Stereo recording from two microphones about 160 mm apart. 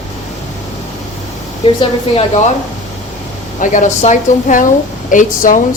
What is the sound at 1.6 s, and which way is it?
Speech, 35° left (ahead or behind).